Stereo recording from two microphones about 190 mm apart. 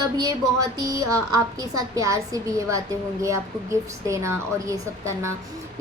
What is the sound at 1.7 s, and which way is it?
A woman's voice, 15° right (ahead or behind).